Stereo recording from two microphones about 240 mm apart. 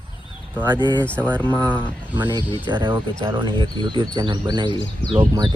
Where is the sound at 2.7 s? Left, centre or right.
Centre.